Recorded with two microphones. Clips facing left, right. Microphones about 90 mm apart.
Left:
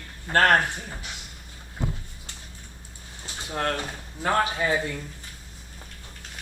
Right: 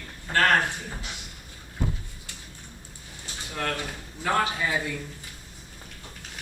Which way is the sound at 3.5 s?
40° left (ahead or behind).